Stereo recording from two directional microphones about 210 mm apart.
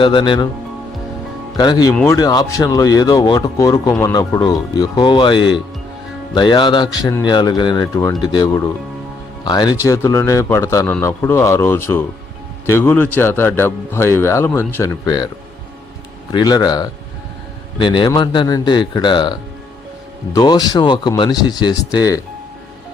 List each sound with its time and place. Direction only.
0.0 s speech: 20° left (ahead or behind)
1.5 s speech: 20° left (ahead or behind)
1.9 s speech: 5° left (ahead or behind)
2.1 s a man's voice: 15° left (ahead or behind)
16.3 s speech: 20° left (ahead or behind)